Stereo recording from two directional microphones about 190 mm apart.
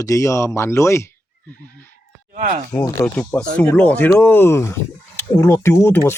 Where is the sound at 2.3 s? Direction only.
40° right (ahead or behind).